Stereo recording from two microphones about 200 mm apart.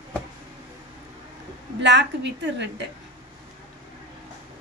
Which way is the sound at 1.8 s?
60° right (ahead or behind).